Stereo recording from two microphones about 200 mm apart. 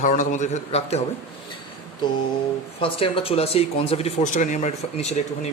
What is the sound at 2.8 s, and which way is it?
Speech, 25° left (ahead or behind).